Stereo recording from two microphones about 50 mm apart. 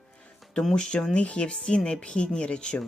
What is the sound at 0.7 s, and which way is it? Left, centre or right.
Speech, centre.